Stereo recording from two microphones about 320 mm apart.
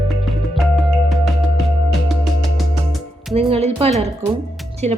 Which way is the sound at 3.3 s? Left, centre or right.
Centre.